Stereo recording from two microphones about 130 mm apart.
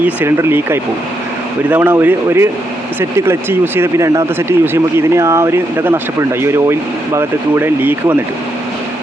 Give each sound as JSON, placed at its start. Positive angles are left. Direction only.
{"t": 0.0, "sound": "speech", "side_deg": -15}